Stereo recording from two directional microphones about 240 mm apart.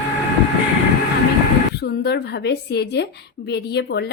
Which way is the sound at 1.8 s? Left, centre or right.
Left.